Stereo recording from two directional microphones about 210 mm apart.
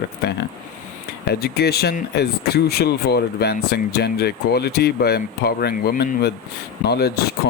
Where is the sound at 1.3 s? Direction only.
50° left (ahead or behind).